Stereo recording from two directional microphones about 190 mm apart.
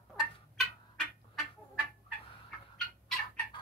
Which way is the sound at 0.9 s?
Centre (ahead or behind).